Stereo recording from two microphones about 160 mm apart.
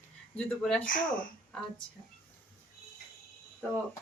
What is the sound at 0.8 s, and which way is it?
Speech, 60° left (ahead or behind).